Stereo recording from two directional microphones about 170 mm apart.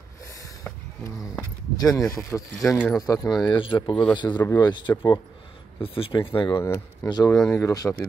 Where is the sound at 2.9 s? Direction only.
20° left (ahead or behind).